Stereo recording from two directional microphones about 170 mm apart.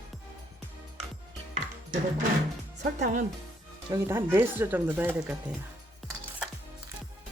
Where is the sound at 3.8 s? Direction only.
15° right (ahead or behind).